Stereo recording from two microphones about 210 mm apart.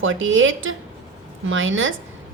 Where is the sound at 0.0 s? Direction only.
70° right (ahead or behind).